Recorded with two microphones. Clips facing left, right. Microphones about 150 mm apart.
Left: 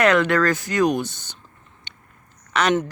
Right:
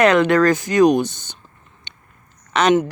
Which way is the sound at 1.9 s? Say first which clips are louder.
Right 1 dB; 20° right (ahead or behind).